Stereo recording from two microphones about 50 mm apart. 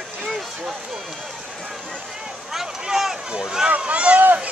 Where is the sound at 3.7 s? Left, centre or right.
Right.